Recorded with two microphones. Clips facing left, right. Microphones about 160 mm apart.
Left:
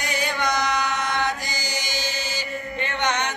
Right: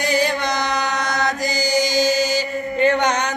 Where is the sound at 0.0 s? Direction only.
35° right (ahead or behind).